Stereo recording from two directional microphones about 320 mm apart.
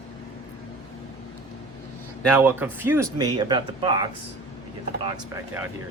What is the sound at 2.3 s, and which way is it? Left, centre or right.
Speech, centre.